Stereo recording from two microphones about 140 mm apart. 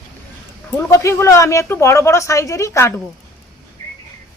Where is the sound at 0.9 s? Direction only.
20° left (ahead or behind).